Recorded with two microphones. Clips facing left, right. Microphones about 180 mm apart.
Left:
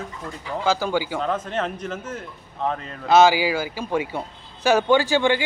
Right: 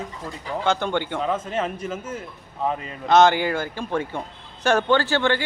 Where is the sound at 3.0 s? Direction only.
5° left (ahead or behind).